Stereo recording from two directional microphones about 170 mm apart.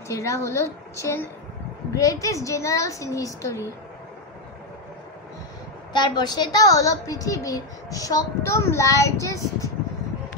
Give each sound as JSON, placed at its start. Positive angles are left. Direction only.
{"t": 0.1, "sound": "a woman's voice", "side_deg": 15}
{"t": 5.9, "sound": "a woman's voice", "side_deg": 25}